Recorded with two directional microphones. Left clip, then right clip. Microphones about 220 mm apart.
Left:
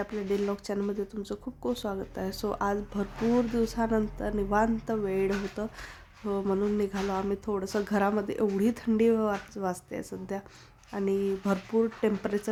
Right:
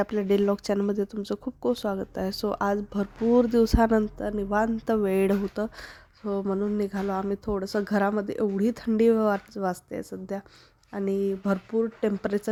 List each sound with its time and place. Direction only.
0.0 s speech: 40° right (ahead or behind)
4.3 s speech: 25° right (ahead or behind)
5.0 s speech: 35° right (ahead or behind)